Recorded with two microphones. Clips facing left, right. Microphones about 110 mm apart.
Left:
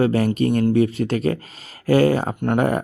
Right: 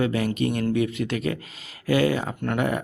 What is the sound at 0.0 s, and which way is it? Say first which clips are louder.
Speech: left 5 dB; 40° left (ahead or behind).